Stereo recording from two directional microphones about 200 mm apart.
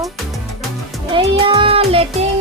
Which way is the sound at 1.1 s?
25° right (ahead or behind).